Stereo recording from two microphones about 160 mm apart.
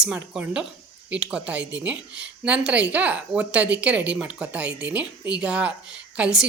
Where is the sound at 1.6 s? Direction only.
90° right.